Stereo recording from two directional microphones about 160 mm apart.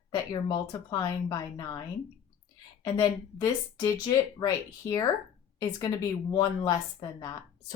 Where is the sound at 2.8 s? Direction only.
25° left (ahead or behind).